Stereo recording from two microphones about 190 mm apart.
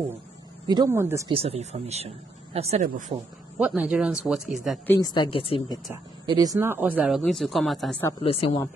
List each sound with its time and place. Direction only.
0.7 s speech: 15° right (ahead or behind)
1.3 s speech: 30° right (ahead or behind)
2.8 s speech: 45° right (ahead or behind)
3.5 s speech: 5° right (ahead or behind)
4.8 s speech: 15° left (ahead or behind)
6.4 s speech: 15° right (ahead or behind); by 8.0 s centre (ahead or behind)
8.2 s speech: 30° left (ahead or behind)